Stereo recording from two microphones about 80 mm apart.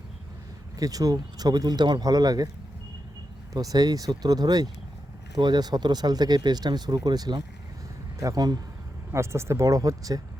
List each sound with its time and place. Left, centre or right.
0.8 s speech: right
3.5 s speech: right
9.1 s speech: right